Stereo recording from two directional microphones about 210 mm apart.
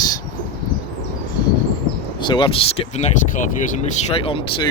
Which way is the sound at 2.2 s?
25° left (ahead or behind).